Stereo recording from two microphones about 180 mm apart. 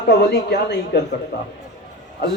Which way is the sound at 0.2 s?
65° left (ahead or behind).